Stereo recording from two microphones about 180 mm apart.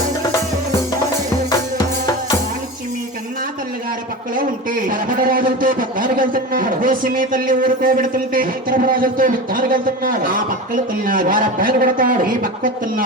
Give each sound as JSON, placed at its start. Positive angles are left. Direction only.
{"t": 4.4, "sound": "a man's voice", "side_deg": -50}